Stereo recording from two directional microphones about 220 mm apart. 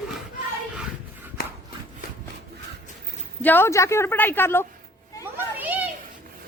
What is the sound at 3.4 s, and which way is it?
Speech, 10° left (ahead or behind).